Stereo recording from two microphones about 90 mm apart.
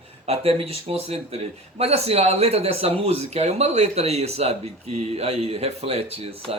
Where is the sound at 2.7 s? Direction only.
90° right.